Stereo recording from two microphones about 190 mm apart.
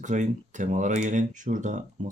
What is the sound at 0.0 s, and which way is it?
Speech, 40° right (ahead or behind).